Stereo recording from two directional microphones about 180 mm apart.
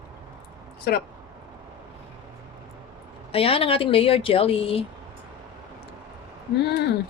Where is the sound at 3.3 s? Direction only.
30° left (ahead or behind).